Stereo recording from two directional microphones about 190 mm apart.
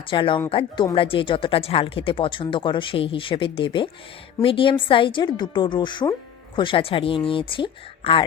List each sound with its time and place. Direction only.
0.1 s speech: 25° left (ahead or behind)